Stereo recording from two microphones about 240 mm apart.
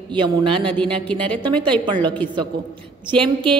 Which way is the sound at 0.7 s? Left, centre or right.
Centre.